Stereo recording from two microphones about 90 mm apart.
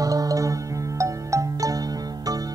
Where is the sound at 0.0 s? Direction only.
40° right (ahead or behind).